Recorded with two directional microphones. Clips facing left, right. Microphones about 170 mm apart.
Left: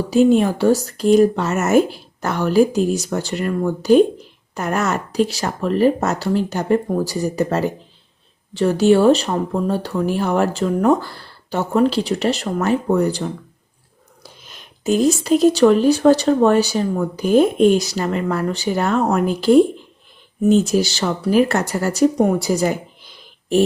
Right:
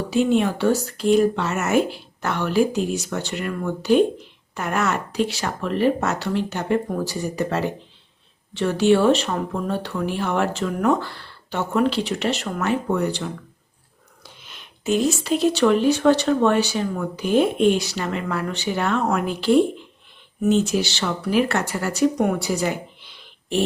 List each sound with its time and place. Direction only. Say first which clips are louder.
0.1 s speech: left 5 dB; 40° left (ahead or behind)